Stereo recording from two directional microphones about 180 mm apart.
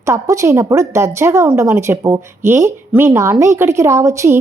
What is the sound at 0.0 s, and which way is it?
A woman's voice, 15° right (ahead or behind).